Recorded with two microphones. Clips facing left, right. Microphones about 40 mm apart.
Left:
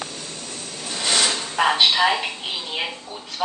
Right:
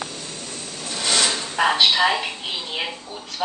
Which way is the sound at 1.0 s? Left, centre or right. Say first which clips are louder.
Even; centre.